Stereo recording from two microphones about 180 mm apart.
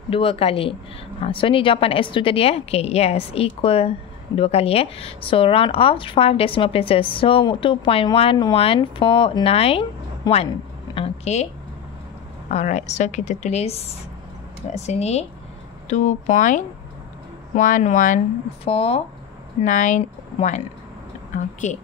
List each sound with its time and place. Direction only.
0.1 s speech: 35° left (ahead or behind)
12.4 s speech: 40° left (ahead or behind)
18.6 s speech: 35° left (ahead or behind)
19.6 s speech: 45° left (ahead or behind)
21.6 s speech: 45° left (ahead or behind)